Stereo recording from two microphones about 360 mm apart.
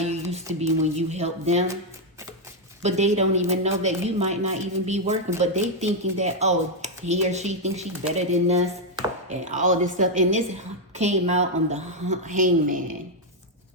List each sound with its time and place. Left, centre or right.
0.0 s music: centre
2.8 s speech: centre